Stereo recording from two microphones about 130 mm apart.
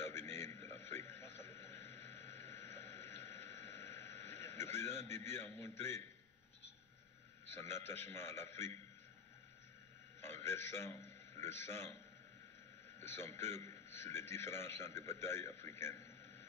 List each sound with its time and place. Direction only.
0.0 s radio: 20° left (ahead or behind)
2.4 s a sound: 20° left (ahead or behind)
7.6 s a man's voice: 15° left (ahead or behind)
10.2 s a man's voice: 15° left (ahead or behind)
13.1 s a man's voice: 20° left (ahead or behind)